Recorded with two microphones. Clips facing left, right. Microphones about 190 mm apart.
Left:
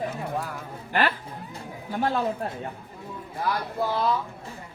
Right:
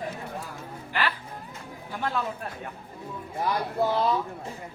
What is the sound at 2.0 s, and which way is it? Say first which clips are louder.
Speech: left 5 dB; 35° left (ahead or behind).